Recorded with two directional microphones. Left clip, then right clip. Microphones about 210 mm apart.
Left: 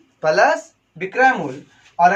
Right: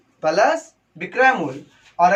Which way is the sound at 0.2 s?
25° left (ahead or behind).